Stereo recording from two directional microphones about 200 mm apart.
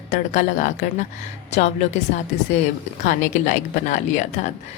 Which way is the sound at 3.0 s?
40° left (ahead or behind).